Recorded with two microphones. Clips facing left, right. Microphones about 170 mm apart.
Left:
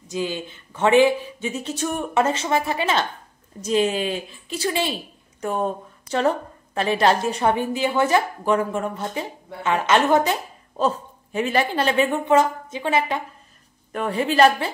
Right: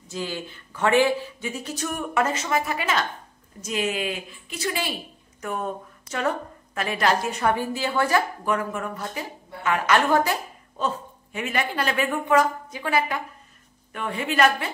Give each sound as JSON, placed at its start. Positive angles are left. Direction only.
{"t": 0.1, "sound": "a woman's voice", "side_deg": 20}
{"t": 7.5, "sound": "speech", "side_deg": 20}
{"t": 11.3, "sound": "speech", "side_deg": 30}
{"t": 13.9, "sound": "a woman's voice", "side_deg": 35}